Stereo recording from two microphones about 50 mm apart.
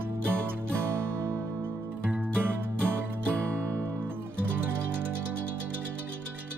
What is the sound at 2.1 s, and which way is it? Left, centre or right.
Music, right.